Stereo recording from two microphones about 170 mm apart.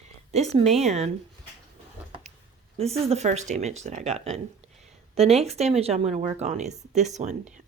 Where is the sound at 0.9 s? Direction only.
40° right (ahead or behind).